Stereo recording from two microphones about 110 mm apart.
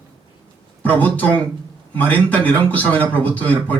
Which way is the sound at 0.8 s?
15° left (ahead or behind).